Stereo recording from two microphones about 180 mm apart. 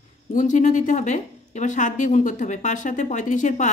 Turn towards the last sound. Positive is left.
turn(degrees=45)  # may be behind; listen again after turning